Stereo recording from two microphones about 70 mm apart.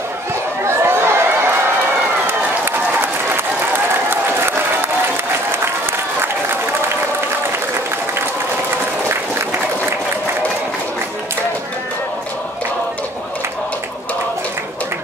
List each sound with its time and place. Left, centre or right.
0.7 s a sound: right
2.2 s run: right
4.1 s applause: right